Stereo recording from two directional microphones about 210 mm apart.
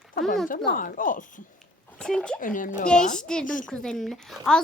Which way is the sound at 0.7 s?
40° left (ahead or behind).